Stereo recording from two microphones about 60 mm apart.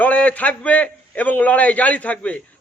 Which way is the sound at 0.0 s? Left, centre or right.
Left.